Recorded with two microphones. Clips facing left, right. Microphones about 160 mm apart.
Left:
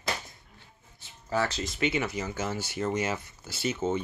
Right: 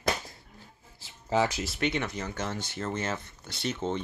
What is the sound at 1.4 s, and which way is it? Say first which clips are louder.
Speech: even; 5° right (ahead or behind).